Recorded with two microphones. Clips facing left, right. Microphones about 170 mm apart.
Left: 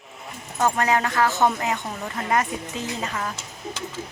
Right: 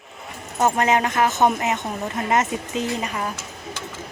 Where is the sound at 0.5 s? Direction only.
20° right (ahead or behind).